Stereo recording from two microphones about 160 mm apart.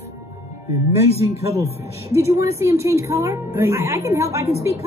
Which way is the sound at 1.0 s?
40° left (ahead or behind).